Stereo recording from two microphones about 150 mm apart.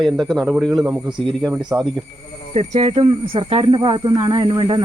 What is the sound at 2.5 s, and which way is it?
Speech, 45° right (ahead or behind).